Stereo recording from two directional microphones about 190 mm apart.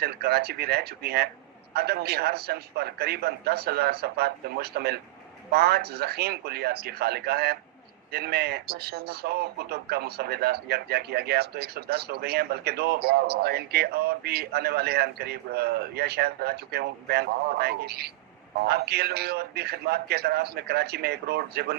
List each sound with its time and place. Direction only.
0.0 s speech: 55° right (ahead or behind)